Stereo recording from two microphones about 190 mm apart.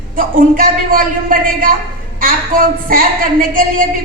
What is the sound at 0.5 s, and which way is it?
A woman's voice, 50° right (ahead or behind).